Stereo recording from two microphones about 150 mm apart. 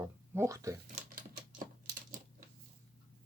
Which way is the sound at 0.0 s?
20° right (ahead or behind).